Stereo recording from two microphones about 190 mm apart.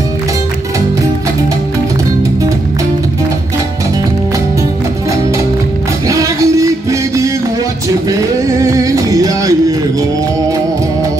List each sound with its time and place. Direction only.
6.0 s music: 15° right (ahead or behind)